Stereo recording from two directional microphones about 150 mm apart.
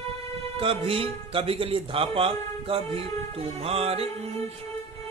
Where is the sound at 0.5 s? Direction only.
40° right (ahead or behind).